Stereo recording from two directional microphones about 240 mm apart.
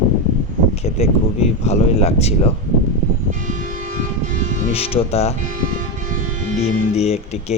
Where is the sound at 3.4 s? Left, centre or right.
Right.